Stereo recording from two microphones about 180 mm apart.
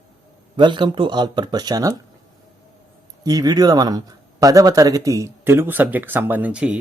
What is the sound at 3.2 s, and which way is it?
Speech, 20° right (ahead or behind).